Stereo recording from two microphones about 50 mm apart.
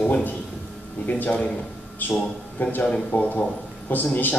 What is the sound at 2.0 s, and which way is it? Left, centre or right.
Speech, left.